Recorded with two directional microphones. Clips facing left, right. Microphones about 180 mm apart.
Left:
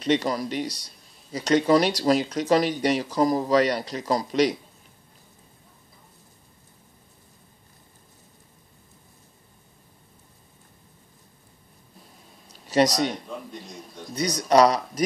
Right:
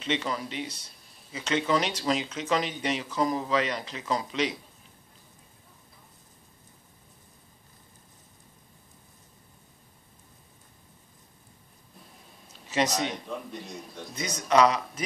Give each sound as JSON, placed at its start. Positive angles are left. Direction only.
{"t": 0.0, "sound": "speech", "side_deg": 40}
{"t": 12.6, "sound": "speech", "side_deg": 35}
{"t": 13.5, "sound": "a man's voice", "side_deg": 0}
{"t": 14.1, "sound": "speech", "side_deg": 35}